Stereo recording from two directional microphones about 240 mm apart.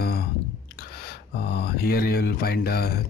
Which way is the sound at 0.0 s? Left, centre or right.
Left.